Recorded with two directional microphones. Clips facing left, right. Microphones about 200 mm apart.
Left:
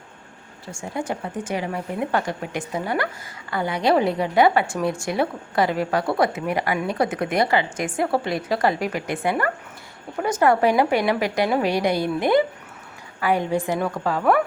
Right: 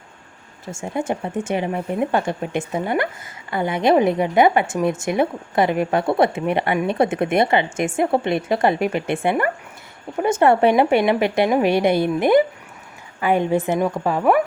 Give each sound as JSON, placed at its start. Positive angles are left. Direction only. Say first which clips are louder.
{"t": 0.6, "sound": "a woman's voice", "louder": "right 4 dB", "side_deg": -25}